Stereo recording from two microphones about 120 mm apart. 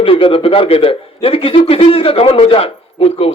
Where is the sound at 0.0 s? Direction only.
50° left (ahead or behind).